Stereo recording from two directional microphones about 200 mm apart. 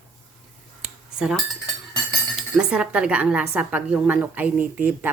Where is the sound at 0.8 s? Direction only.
5° right (ahead or behind).